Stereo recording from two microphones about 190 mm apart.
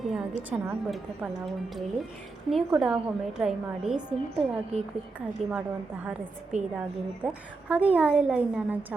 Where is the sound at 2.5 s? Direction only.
Centre (ahead or behind).